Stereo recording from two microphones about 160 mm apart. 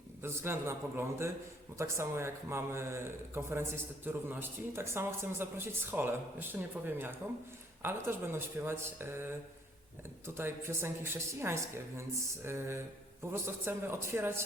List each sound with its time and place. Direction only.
0.2 s speech: 15° right (ahead or behind)